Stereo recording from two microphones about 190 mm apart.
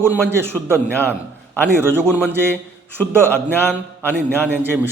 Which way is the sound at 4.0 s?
10° left (ahead or behind).